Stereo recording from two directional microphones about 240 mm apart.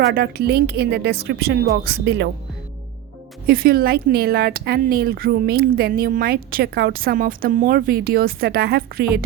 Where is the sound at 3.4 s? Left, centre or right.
Right.